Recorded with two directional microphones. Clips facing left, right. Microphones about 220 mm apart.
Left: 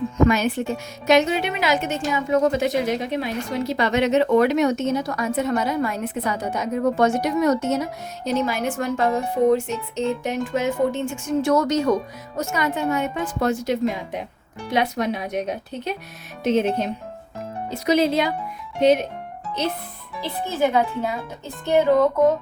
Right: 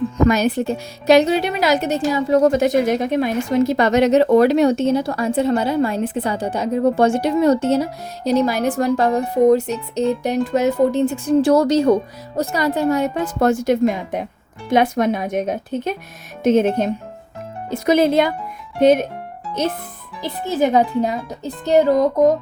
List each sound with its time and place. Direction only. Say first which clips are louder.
0.2 s a woman's voice: right 2 dB; 40° right (ahead or behind)
20.5 s a woman's voice: right 5 dB; 40° right (ahead or behind)